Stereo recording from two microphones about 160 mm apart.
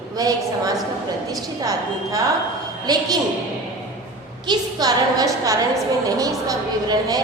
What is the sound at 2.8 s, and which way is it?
Speech, 25° right (ahead or behind).